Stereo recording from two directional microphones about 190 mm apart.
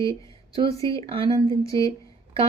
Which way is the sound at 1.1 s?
30° right (ahead or behind).